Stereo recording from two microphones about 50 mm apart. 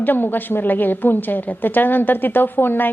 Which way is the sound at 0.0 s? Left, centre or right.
Left.